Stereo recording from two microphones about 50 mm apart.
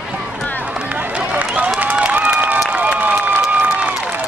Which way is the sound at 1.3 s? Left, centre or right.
Right.